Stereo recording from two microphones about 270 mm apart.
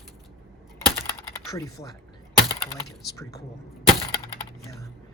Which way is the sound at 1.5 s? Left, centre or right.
Centre.